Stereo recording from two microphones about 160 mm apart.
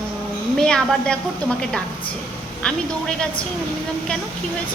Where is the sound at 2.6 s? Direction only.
5° left (ahead or behind).